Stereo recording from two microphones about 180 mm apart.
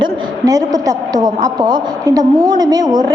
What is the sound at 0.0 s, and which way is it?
A woman's voice, 20° right (ahead or behind).